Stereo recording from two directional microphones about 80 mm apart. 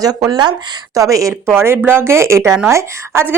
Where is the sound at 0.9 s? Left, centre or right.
Right.